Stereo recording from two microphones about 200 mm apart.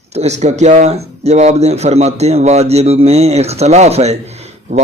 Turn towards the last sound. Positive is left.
turn(degrees=-30)  # may be behind; listen again after turning